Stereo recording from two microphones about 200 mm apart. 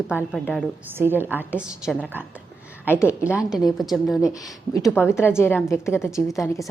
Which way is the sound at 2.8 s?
15° left (ahead or behind).